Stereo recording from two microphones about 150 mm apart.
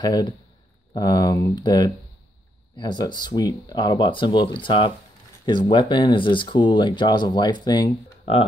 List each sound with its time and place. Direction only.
0.0 s speech: 30° left (ahead or behind)